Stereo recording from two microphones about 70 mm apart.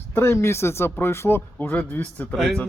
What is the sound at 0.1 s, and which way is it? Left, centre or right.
Speech, left.